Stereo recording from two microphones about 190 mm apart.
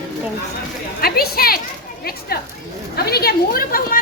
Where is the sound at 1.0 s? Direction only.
55° left (ahead or behind).